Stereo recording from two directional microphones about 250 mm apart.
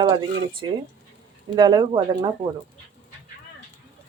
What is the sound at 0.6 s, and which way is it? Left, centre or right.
Speech, centre.